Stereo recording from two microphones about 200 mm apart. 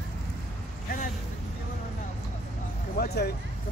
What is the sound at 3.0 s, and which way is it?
Speech, 50° left (ahead or behind).